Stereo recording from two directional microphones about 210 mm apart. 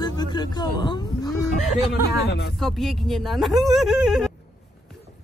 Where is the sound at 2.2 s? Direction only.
50° left (ahead or behind).